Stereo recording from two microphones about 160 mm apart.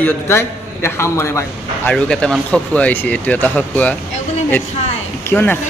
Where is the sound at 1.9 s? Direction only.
5° left (ahead or behind).